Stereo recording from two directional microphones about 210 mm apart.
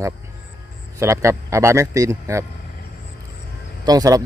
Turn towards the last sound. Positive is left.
turn(degrees=-20)  # may be behind; listen again after turning